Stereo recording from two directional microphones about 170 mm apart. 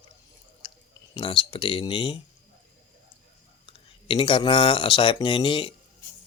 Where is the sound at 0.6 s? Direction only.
30° left (ahead or behind).